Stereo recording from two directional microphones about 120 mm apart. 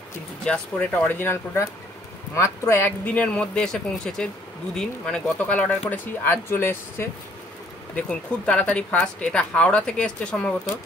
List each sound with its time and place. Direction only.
0.5 s speech: 15° left (ahead or behind)